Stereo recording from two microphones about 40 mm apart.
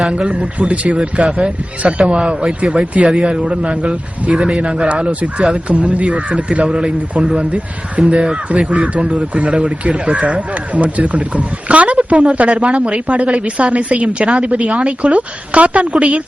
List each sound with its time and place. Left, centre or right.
0.1 s speech: right
4.4 s speech: centre
4.6 s speech: right